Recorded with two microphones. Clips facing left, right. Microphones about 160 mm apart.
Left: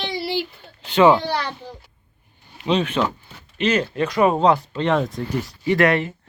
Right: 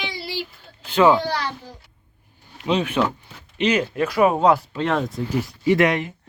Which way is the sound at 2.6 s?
10° right (ahead or behind).